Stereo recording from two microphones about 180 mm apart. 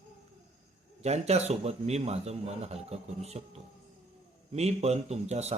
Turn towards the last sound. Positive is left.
turn(degrees=-35)  # may be behind; listen again after turning